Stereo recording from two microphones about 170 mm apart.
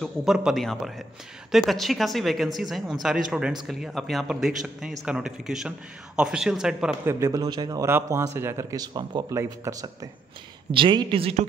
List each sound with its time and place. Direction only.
0.0 s a man's voice: centre (ahead or behind)
7.1 s speech: 20° right (ahead or behind)
10.7 s speech: 30° right (ahead or behind)